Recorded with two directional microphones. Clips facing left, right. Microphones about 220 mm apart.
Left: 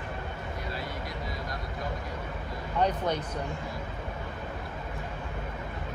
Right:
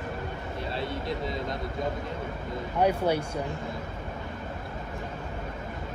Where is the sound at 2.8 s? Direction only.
10° right (ahead or behind).